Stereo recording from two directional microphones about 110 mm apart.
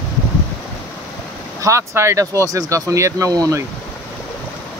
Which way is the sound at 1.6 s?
25° right (ahead or behind).